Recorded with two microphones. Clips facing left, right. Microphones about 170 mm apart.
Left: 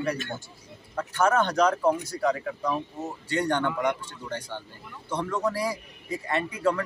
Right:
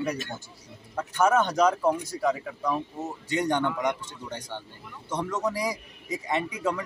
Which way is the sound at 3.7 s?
5° left (ahead or behind).